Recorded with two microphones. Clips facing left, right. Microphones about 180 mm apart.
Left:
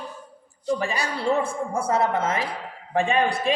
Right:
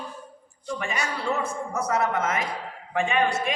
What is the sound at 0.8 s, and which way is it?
A man's voice, 35° left (ahead or behind).